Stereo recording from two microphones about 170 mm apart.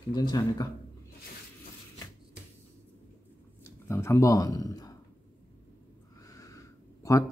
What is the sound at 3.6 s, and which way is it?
Speech, 15° left (ahead or behind).